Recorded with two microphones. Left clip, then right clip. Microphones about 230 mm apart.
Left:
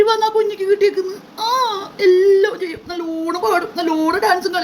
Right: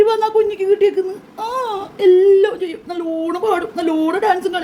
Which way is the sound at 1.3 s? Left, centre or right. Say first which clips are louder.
Left 4 dB; right.